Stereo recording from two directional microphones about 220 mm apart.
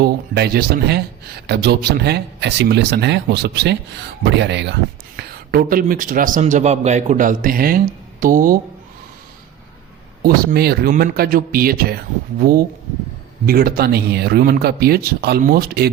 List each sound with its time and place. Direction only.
0.0 s speech: 45° right (ahead or behind)
10.2 s speech: 45° right (ahead or behind)